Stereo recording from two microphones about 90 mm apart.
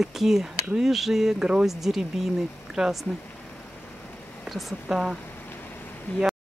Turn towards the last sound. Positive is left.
turn(degrees=20)  # may be behind; listen again after turning